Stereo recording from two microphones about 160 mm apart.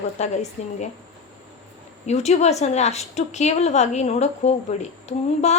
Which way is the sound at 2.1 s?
45° left (ahead or behind).